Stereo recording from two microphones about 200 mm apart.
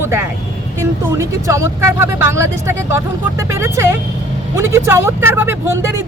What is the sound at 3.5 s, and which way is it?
Speech, 15° right (ahead or behind).